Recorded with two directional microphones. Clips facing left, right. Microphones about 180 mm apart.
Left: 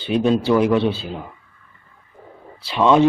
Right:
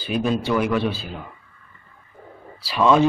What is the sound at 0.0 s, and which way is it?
Speech, 25° left (ahead or behind).